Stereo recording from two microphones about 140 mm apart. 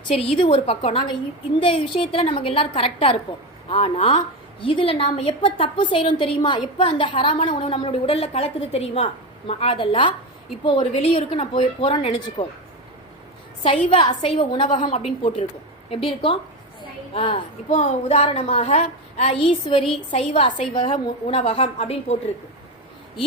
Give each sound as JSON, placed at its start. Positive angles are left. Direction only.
{"t": 0.2, "sound": "a woman's voice", "side_deg": 40}
{"t": 13.9, "sound": "a woman's voice", "side_deg": 35}
{"t": 14.9, "sound": "a woman's voice", "side_deg": 50}
{"t": 17.7, "sound": "a woman's voice", "side_deg": 55}